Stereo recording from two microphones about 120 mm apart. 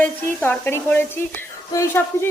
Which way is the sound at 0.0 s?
15° left (ahead or behind).